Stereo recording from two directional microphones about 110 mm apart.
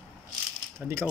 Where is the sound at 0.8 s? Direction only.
20° right (ahead or behind).